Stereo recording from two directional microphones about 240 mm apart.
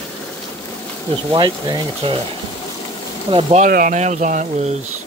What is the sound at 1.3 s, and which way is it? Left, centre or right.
Speech, centre.